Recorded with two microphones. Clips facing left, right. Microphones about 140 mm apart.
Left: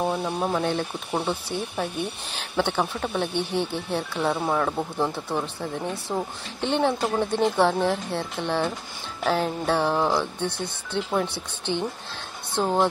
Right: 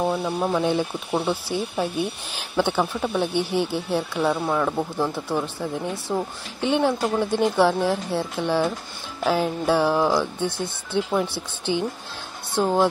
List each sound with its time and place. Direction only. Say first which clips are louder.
0.0 s speech: right 2 dB; centre (ahead or behind)